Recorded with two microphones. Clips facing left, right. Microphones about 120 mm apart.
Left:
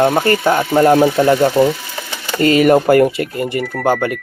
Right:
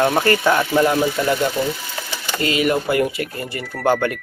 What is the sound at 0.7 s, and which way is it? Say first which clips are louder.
Speech: left 9 dB; 40° left (ahead or behind).